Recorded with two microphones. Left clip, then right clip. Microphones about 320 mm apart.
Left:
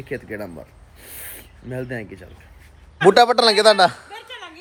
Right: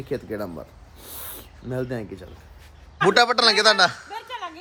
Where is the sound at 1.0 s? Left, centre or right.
Centre.